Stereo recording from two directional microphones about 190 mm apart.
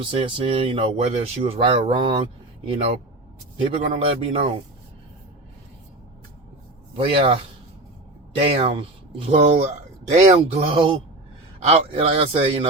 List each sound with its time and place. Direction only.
0.0 s speech: 25° right (ahead or behind)
3.7 s speech: 30° right (ahead or behind)
6.9 s speech: 30° right (ahead or behind)
8.4 s a man's voice: 30° right (ahead or behind)